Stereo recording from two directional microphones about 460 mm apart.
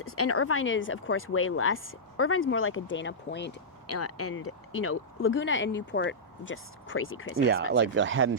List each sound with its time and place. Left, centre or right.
0.0 s speech: left
7.7 s speech: right